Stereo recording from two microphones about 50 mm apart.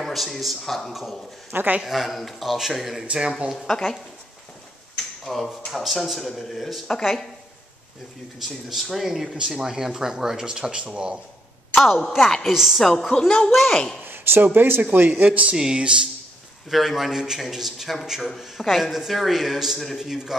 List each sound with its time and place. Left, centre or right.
0.0 s speech: centre
3.1 s speech: centre
3.6 s speech: centre
5.2 s speech: centre
8.6 s speech: centre
11.7 s speech: centre
12.5 s speech: centre
12.8 s speech: centre
14.0 s speech: right
15.5 s speech: centre